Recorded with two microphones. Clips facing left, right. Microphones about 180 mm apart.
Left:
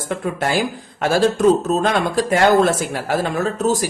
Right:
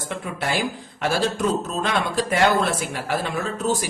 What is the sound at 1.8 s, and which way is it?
Speech, 45° left (ahead or behind).